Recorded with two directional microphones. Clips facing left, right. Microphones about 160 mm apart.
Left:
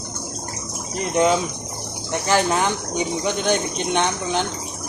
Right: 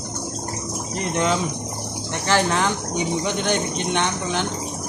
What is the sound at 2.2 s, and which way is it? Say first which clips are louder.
Speech: left 1 dB; 15° left (ahead or behind).